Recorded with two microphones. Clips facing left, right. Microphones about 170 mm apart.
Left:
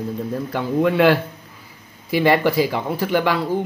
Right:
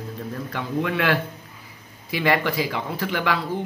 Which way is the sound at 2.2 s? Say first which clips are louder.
Left 6 dB; 30° left (ahead or behind).